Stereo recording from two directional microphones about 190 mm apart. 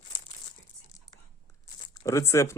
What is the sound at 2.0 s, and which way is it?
Speech, 15° left (ahead or behind).